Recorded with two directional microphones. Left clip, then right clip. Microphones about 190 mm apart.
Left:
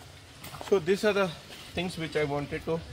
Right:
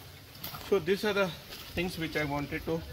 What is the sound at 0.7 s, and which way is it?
Speech, 75° left (ahead or behind).